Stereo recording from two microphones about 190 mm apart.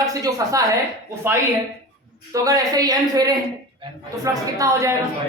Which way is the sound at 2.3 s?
20° right (ahead or behind).